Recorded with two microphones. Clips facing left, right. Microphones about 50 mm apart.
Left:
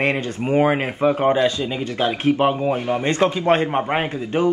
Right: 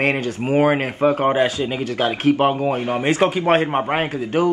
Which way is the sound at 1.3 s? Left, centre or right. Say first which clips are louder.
Even; right.